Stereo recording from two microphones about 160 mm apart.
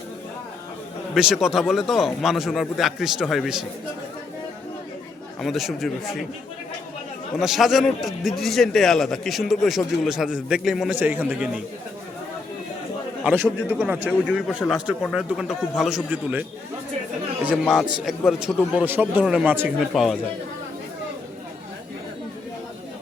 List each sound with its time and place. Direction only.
1.1 s a man's voice: 5° right (ahead or behind)
5.4 s a man's voice: centre (ahead or behind)
7.3 s a man's voice: centre (ahead or behind)
13.2 s a man's voice: 15° right (ahead or behind)